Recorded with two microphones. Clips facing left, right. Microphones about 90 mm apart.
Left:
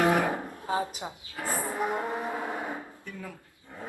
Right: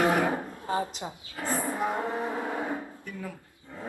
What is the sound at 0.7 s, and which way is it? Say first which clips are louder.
Speech: even; 15° left (ahead or behind).